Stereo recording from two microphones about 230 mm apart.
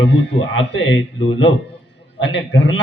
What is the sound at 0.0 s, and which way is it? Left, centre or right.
A man's voice, left.